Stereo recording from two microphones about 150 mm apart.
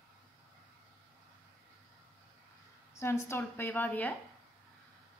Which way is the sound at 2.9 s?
20° left (ahead or behind).